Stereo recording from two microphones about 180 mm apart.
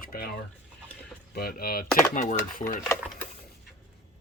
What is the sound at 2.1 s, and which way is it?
Speech, 45° left (ahead or behind).